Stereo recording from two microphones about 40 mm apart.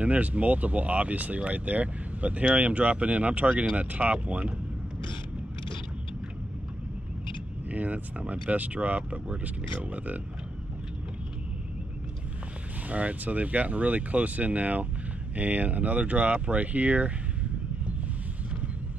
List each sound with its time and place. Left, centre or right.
0.0 s speech: right
7.7 s speech: right
12.8 s speech: right